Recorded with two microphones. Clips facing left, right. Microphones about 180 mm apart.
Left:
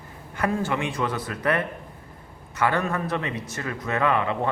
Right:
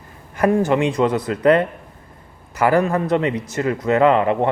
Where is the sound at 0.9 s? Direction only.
35° right (ahead or behind).